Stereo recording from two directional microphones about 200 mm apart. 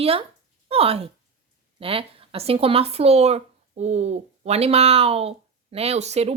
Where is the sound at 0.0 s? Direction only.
30° right (ahead or behind).